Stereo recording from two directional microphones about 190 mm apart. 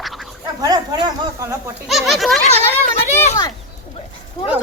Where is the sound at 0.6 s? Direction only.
20° right (ahead or behind).